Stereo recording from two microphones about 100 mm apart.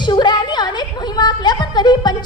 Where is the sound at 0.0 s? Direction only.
50° left (ahead or behind).